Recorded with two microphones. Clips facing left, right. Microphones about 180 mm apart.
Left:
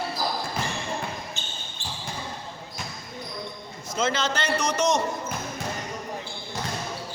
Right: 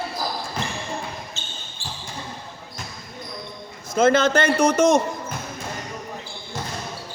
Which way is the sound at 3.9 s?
50° right (ahead or behind).